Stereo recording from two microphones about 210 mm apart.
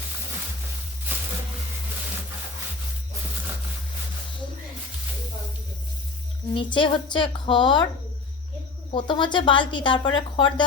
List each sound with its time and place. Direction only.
6.5 s a woman's voice: 25° left (ahead or behind)
8.9 s a woman's voice: 20° left (ahead or behind)